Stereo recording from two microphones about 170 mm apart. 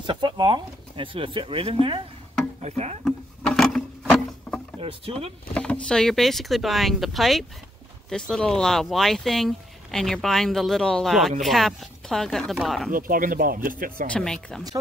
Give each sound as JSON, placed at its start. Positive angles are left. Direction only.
{"t": 0.0, "sound": "speech", "side_deg": -30}
{"t": 3.1, "sound": "a sound", "side_deg": 0}
{"t": 4.7, "sound": "speech", "side_deg": -30}
{"t": 5.5, "sound": "speech", "side_deg": 5}
{"t": 12.9, "sound": "speech", "side_deg": -55}
{"t": 14.1, "sound": "speech", "side_deg": 5}